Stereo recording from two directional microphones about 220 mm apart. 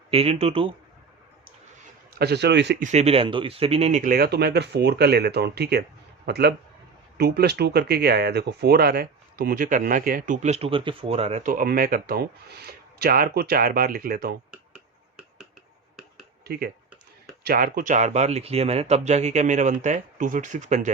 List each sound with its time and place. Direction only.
0.1 s speech: 25° right (ahead or behind)
2.1 s speech: 50° right (ahead or behind)
2.8 s speech: 30° right (ahead or behind)
14.5 s finger snapping: 5° right (ahead or behind)
16.5 s speech: 45° right (ahead or behind)